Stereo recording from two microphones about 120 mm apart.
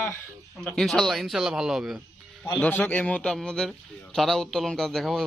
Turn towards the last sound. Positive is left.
turn(degrees=5)  # may be behind; listen again after turning